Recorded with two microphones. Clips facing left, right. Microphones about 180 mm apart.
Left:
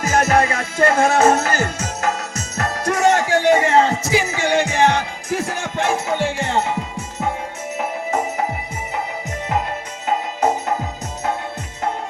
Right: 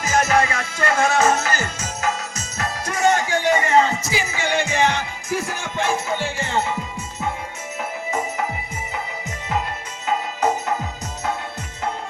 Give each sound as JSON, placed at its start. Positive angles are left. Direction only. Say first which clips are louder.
{"t": 0.0, "sound": "music", "louder": "left 2 dB", "side_deg": 60}
{"t": 4.4, "sound": "music", "louder": "left 1 dB", "side_deg": 45}
{"t": 5.3, "sound": "music", "louder": "left 3 dB", "side_deg": 70}